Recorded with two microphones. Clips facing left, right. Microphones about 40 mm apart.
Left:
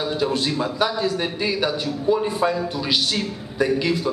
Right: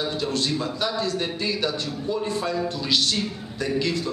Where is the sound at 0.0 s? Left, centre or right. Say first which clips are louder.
Left 3 dB; centre.